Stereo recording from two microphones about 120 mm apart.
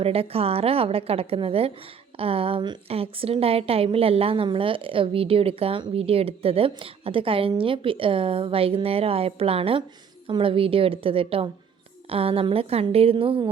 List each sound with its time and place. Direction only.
0.0 s a woman's voice: 55° right (ahead or behind)